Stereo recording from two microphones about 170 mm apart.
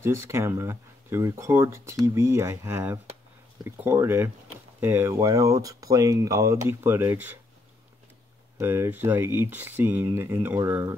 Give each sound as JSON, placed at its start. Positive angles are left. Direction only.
{"t": 0.0, "sound": "speech", "side_deg": -15}
{"t": 8.5, "sound": "speech", "side_deg": -15}